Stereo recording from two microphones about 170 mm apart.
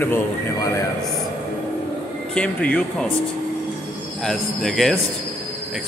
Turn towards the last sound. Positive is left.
turn(degrees=0)  # may be behind; listen again after turning